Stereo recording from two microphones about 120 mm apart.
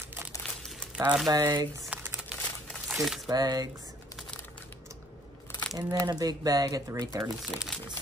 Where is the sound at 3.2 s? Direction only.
35° right (ahead or behind).